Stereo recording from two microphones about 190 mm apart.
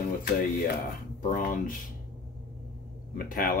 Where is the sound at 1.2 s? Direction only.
45° left (ahead or behind).